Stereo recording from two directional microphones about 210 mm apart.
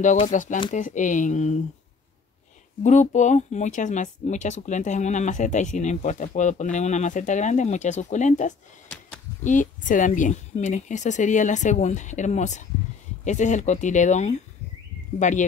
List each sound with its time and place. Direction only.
0.0 s speech: 35° left (ahead or behind)
2.8 s speech: 35° left (ahead or behind)